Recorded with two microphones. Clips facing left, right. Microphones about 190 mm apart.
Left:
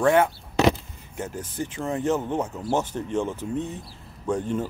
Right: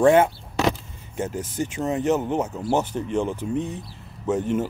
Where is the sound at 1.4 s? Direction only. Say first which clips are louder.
Right 4 dB; 90° right.